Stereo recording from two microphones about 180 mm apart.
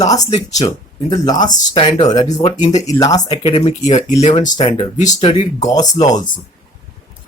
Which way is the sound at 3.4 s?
35° left (ahead or behind).